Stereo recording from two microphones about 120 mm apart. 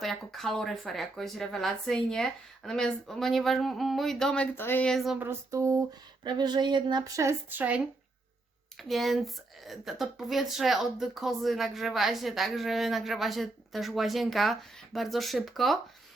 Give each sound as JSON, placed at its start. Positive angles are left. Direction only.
{"t": 0.0, "sound": "a woman's voice", "side_deg": 0}
{"t": 4.5, "sound": "speech", "side_deg": 20}
{"t": 4.9, "sound": "a woman's voice", "side_deg": 0}
{"t": 5.2, "sound": "a sound", "side_deg": -20}
{"t": 6.2, "sound": "speech", "side_deg": -35}
{"t": 7.2, "sound": "a sound", "side_deg": -25}
{"t": 8.8, "sound": "a woman's voice", "side_deg": 0}